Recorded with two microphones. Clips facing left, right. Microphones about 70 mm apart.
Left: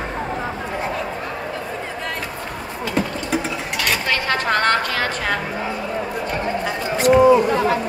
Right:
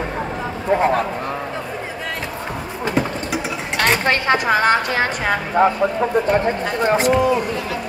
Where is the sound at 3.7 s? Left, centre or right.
Right.